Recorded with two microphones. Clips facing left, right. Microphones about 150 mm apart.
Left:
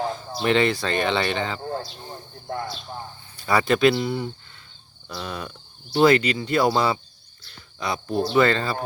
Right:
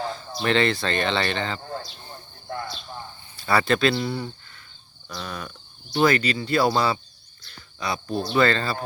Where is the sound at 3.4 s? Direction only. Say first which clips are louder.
Left 2 dB; 15° left (ahead or behind).